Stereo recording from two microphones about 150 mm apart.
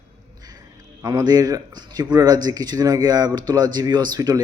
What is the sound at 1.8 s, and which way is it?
A man's voice, 30° right (ahead or behind).